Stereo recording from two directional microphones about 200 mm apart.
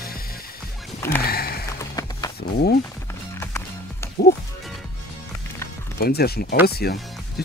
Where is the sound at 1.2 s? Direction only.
50° left (ahead or behind).